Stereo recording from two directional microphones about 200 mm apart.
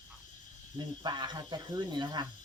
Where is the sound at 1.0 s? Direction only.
20° right (ahead or behind).